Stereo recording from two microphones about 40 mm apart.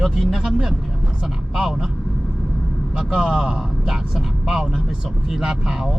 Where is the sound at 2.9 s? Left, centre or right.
Centre.